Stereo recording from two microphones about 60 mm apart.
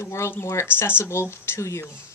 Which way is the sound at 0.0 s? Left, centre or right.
Left.